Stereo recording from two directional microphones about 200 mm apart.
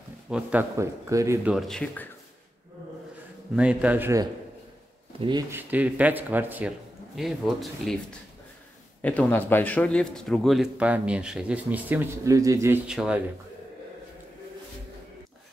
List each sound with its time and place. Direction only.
0.3 s a man's voice: 5° right (ahead or behind)
1.5 s a man's voice: centre (ahead or behind)
3.5 s a man's voice: 5° right (ahead or behind)
5.1 s speech: 30° right (ahead or behind)
5.5 s a man's voice: 10° right (ahead or behind)
9.0 s a man's voice: 5° left (ahead or behind)